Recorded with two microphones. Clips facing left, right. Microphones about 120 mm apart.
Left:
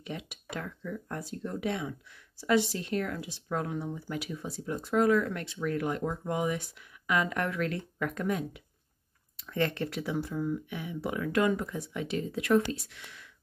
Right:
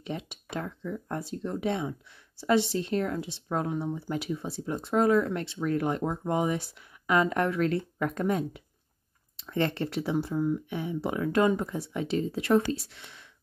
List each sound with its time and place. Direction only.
0.0 s speech: 30° right (ahead or behind)